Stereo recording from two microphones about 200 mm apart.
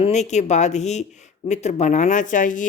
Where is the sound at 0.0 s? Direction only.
35° left (ahead or behind).